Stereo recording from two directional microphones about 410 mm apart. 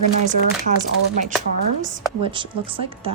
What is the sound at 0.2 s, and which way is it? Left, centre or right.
Speech, centre.